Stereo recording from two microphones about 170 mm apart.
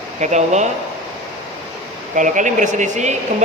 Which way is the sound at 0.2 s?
45° right (ahead or behind).